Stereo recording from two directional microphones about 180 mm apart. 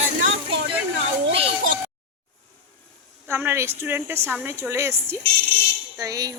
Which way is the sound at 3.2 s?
15° right (ahead or behind).